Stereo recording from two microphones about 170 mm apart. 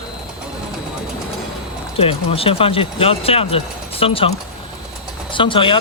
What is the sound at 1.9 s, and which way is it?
Speech, 35° left (ahead or behind).